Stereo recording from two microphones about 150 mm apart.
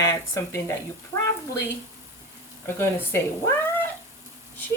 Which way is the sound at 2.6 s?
15° left (ahead or behind).